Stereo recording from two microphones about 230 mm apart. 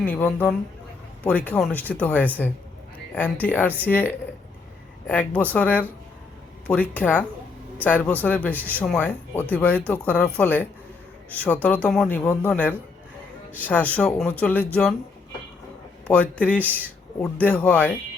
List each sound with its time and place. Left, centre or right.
0.0 s speech: centre
16.0 s speech: centre